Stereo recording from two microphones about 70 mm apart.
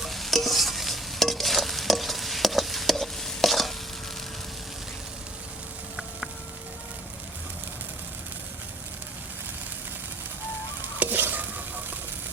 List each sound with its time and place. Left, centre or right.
0.0 s stir: centre
11.0 s stir: right